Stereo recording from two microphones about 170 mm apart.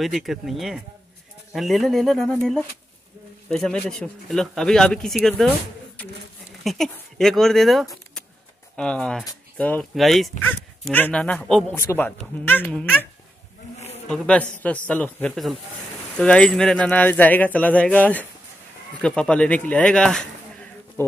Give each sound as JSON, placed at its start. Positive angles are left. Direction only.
{"t": 0.0, "sound": "speech", "side_deg": 0}
{"t": 3.4, "sound": "speech", "side_deg": 5}
{"t": 10.4, "sound": "speech", "side_deg": 10}
{"t": 13.7, "sound": "livestock", "side_deg": 40}
{"t": 14.0, "sound": "speech", "side_deg": 5}